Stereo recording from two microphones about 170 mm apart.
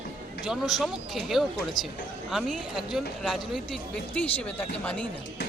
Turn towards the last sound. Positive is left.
turn(degrees=10)  # may be behind; listen again after turning